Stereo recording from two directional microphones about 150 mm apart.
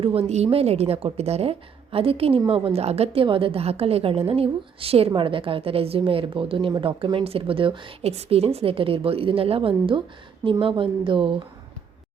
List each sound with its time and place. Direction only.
0.0 s a woman's voice: 40° right (ahead or behind)